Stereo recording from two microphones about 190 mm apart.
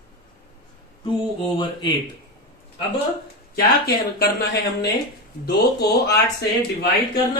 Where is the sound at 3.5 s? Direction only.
55° left (ahead or behind).